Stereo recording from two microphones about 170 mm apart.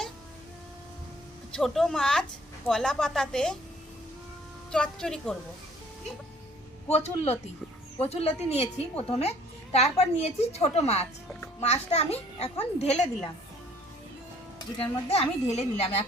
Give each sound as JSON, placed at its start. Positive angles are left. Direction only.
{"t": 1.5, "sound": "a woman's voice", "side_deg": 0}
{"t": 4.7, "sound": "a woman's voice", "side_deg": 5}
{"t": 6.9, "sound": "a woman's voice", "side_deg": 40}
{"t": 14.6, "sound": "a woman's voice", "side_deg": 35}